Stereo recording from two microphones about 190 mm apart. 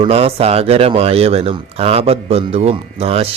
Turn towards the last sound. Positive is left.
turn(degrees=-30)  # may be behind; listen again after turning